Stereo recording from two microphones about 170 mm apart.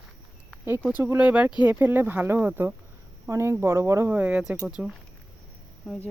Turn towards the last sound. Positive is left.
turn(degrees=0)  # may be behind; listen again after turning